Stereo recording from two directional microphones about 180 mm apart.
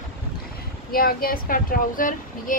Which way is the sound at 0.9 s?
55° left (ahead or behind).